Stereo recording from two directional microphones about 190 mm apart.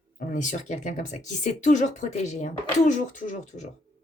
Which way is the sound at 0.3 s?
40° left (ahead or behind).